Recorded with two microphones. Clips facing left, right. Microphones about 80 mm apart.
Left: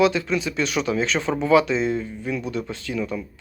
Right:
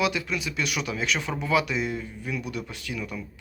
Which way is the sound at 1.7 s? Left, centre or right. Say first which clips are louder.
Left 6 dB; left.